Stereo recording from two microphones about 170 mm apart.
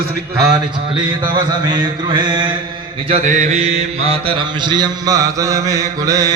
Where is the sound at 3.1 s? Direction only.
45° right (ahead or behind); by 6.3 s 20° right (ahead or behind).